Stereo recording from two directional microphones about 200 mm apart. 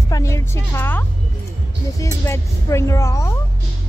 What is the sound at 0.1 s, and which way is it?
Music, 15° left (ahead or behind).